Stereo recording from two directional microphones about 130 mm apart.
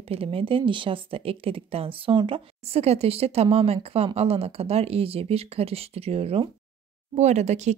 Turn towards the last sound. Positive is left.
turn(degrees=-60)  # may be behind; listen again after turning